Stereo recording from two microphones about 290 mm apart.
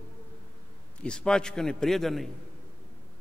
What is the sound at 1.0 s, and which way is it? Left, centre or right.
A man's voice, centre.